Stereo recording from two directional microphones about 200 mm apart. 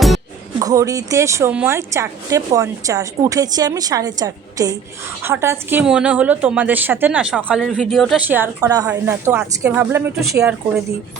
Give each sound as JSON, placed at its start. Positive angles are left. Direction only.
{"t": 0.6, "sound": "a woman's voice", "side_deg": -15}